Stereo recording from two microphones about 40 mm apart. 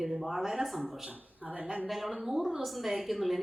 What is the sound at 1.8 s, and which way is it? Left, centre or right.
Speech, centre.